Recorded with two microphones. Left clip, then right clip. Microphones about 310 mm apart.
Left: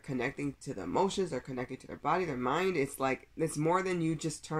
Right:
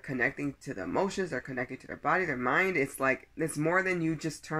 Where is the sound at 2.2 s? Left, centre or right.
Centre.